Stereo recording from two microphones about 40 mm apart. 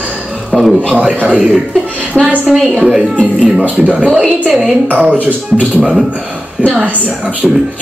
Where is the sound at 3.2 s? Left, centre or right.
Right.